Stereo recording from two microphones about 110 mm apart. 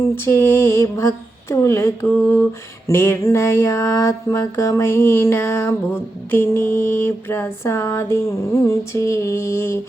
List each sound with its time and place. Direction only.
0.3 s mantra: 20° left (ahead or behind)